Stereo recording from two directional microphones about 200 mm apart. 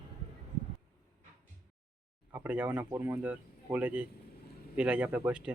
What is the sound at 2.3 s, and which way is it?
A man's voice, 10° right (ahead or behind).